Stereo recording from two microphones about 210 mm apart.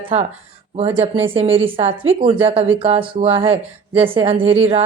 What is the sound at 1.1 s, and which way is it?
Speech, 25° right (ahead or behind).